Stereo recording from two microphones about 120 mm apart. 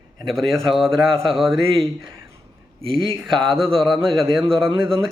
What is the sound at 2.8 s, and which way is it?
Speech, 50° right (ahead or behind).